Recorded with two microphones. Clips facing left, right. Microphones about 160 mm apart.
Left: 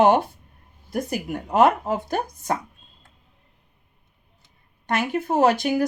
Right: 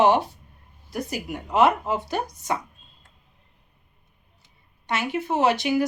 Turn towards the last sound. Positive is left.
turn(degrees=50)  # may be behind; listen again after turning